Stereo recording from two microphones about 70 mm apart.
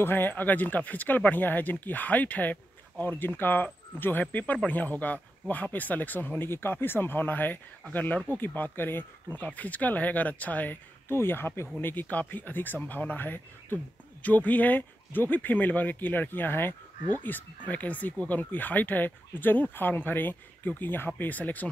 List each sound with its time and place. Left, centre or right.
0.0 s speech: left